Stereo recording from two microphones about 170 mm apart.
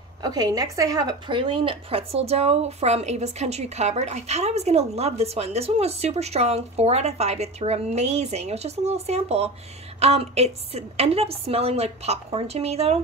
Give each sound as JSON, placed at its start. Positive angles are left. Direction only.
{"t": 0.2, "sound": "a woman's voice", "side_deg": -25}